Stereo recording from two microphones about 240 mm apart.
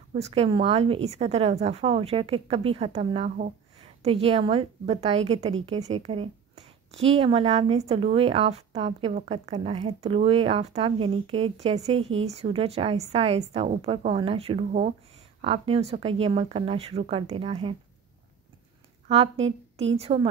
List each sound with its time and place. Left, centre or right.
0.1 s speech: right
19.0 s speech: right